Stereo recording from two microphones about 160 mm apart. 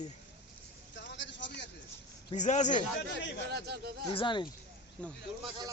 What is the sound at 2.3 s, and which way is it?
Speech, 50° left (ahead or behind).